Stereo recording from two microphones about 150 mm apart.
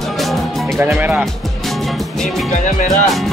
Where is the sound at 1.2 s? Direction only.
Centre (ahead or behind).